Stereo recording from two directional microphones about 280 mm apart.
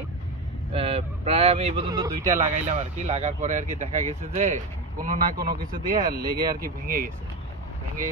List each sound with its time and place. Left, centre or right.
0.7 s speech: centre
2.3 s speech: right